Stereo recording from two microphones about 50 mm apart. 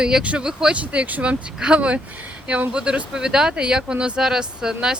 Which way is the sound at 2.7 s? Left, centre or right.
Centre.